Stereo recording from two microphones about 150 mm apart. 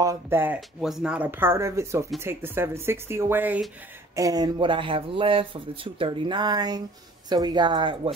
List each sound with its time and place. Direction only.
0.0 s speech: 20° right (ahead or behind)
0.7 s speech: 5° right (ahead or behind)
4.1 s speech: 25° right (ahead or behind)